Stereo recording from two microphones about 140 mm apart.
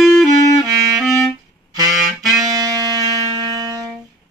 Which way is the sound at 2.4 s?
25° right (ahead or behind).